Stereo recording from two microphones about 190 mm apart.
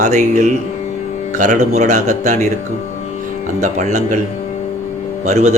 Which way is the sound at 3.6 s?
40° right (ahead or behind).